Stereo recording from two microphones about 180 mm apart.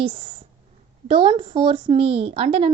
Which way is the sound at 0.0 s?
30° right (ahead or behind).